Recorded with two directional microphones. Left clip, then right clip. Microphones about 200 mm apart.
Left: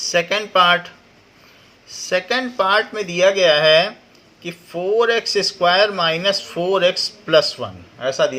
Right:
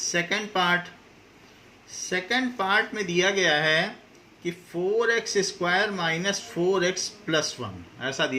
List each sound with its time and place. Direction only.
0.1 s speech: 45° left (ahead or behind)